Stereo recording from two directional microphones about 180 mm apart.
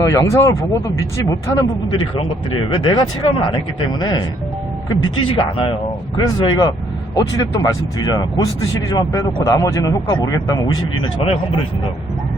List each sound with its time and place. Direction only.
0.0 s speech: 15° left (ahead or behind)
4.9 s speech: 25° left (ahead or behind)